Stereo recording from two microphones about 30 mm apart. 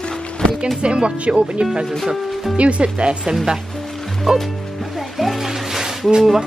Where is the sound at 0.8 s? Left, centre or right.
Right.